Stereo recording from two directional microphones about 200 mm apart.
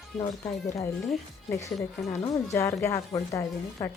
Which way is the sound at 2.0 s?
15° left (ahead or behind).